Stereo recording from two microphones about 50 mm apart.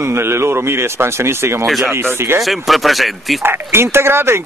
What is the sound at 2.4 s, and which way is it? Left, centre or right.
Speech, centre.